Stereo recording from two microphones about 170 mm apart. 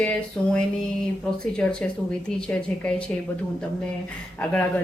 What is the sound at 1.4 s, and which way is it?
A woman's voice, 5° left (ahead or behind).